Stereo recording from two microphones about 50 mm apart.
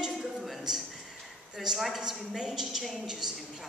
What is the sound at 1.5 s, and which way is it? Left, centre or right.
A woman's voice, centre.